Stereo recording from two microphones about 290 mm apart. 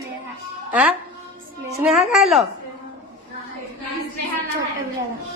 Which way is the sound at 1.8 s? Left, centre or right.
Centre.